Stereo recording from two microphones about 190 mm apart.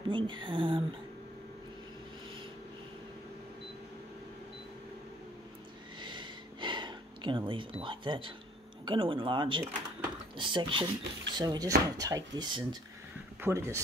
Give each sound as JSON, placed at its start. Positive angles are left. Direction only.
{"t": 0.1, "sound": "speech", "side_deg": -25}
{"t": 5.9, "sound": "a sound", "side_deg": -25}
{"t": 8.8, "sound": "speech", "side_deg": -25}